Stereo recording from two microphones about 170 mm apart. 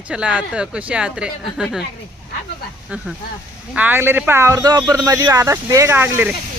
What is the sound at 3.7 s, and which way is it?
Speech, 10° right (ahead or behind).